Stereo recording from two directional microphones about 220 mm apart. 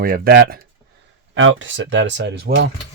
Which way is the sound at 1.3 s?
60° right (ahead or behind).